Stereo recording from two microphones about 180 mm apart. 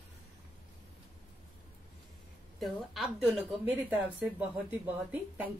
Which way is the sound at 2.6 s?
Centre (ahead or behind).